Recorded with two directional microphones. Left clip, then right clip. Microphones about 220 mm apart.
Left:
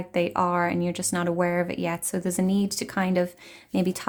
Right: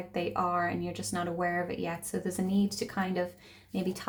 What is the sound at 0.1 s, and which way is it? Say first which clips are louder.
Speech: left 7 dB; 50° left (ahead or behind).